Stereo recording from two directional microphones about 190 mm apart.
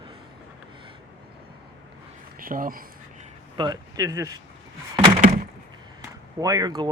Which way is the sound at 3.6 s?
20° right (ahead or behind).